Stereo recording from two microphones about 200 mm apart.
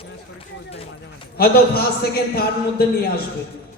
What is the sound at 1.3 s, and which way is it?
Speech, 50° left (ahead or behind).